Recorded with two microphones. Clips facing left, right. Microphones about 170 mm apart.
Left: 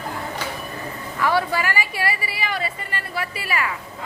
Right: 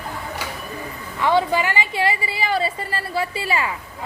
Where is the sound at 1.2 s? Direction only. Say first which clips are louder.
Right 3 dB; 20° right (ahead or behind).